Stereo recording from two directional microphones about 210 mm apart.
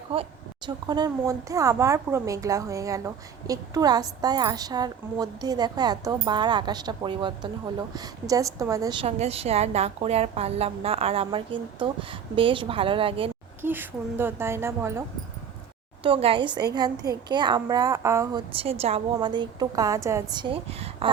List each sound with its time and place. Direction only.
0.1 s a woman's voice: 25° right (ahead or behind)
13.6 s a child's voice: 10° right (ahead or behind)
16.0 s a woman's voice: 25° right (ahead or behind)
18.5 s a woman's voice: 30° right (ahead or behind)